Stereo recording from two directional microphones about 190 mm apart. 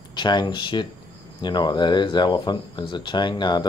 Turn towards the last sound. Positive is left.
turn(degrees=25)  # may be behind; listen again after turning